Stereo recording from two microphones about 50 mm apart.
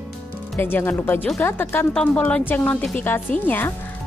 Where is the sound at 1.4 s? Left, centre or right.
Left.